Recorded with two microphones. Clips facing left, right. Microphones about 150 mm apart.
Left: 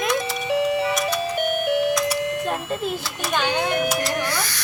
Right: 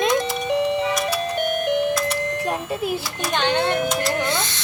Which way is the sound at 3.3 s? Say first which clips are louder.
Right 2 dB; 10° left (ahead or behind).